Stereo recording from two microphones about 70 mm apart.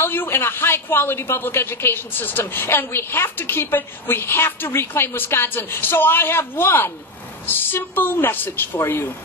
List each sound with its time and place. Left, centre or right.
0.0 s a woman's voice: left